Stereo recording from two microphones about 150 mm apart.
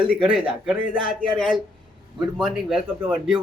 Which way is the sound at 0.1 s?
5° right (ahead or behind).